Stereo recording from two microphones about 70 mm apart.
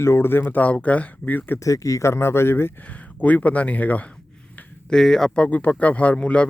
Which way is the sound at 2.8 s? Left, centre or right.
Left.